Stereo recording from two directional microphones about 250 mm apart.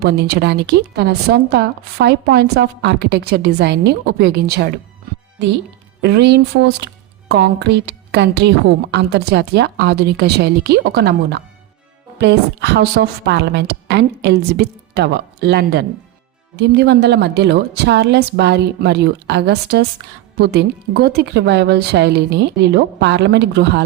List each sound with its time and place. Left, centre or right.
0.0 s a woman's voice: right
6.0 s a woman's voice: right